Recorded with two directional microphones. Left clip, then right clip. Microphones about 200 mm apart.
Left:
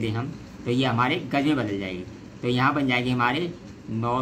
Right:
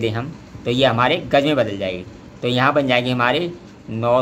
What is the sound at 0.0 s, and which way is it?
A man's voice, 30° right (ahead or behind).